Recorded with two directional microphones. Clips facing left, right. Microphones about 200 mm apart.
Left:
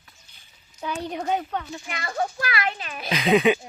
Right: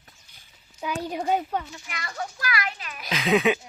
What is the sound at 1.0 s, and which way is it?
Speech, 5° right (ahead or behind).